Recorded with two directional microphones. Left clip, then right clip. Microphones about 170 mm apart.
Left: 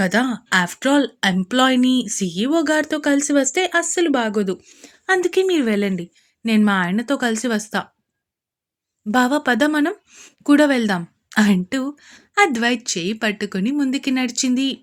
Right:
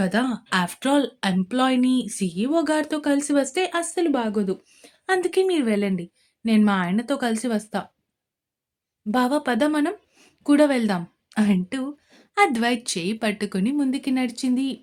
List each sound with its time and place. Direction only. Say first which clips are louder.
0.0 s speech: left 5 dB; 25° left (ahead or behind)
9.0 s speech: left 5 dB; 25° left (ahead or behind)